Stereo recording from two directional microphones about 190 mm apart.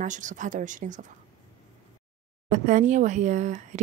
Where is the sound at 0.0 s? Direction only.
40° right (ahead or behind).